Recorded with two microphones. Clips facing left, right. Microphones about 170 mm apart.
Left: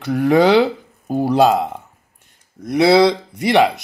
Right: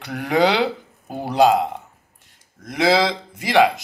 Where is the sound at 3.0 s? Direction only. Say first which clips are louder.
Left 8 dB; 20° left (ahead or behind).